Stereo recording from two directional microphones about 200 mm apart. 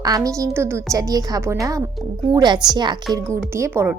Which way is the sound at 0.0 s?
15° right (ahead or behind).